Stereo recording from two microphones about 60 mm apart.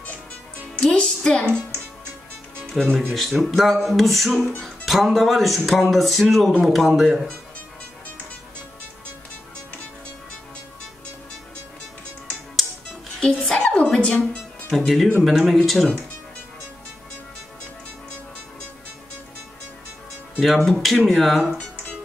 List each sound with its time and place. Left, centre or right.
0.9 s speech: centre
13.2 s music: centre
13.7 s a sound: left
13.9 s music: centre
15.2 s speech: centre
20.3 s speech: centre